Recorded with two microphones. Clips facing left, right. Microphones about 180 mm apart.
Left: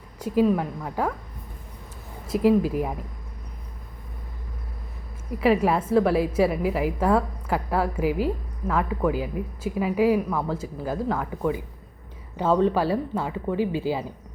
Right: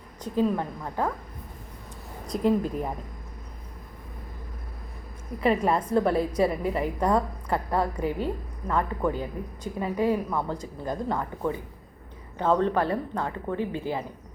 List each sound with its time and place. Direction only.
0.2 s speech: 10° left (ahead or behind)
2.2 s a woman's voice: 5° left (ahead or behind)
5.4 s a woman's voice: 5° left (ahead or behind)
13.6 s speech: 90° left